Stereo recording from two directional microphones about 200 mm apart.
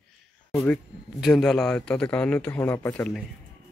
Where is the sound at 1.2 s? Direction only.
Centre (ahead or behind).